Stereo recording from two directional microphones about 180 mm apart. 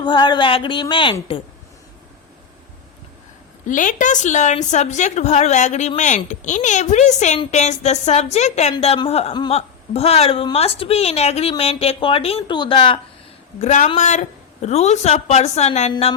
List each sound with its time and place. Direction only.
0.0 s a woman's voice: 25° left (ahead or behind)
3.7 s speech: 45° left (ahead or behind); by 13.0 s 25° left (ahead or behind)
13.6 s speech: 40° left (ahead or behind)